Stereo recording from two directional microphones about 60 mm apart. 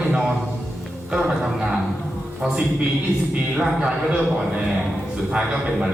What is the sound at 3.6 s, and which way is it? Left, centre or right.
Speech, centre.